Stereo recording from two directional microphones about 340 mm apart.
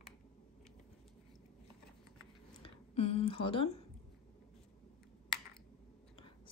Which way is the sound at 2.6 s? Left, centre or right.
Centre.